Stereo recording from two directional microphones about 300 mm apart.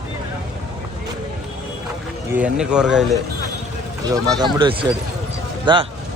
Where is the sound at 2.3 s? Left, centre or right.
Centre.